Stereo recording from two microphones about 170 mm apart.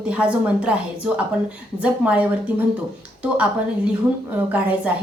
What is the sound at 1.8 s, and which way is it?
A woman's voice, 10° right (ahead or behind).